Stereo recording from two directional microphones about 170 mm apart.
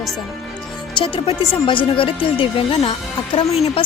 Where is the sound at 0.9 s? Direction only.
30° left (ahead or behind).